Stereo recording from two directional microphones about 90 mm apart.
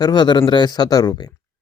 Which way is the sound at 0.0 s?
50° left (ahead or behind).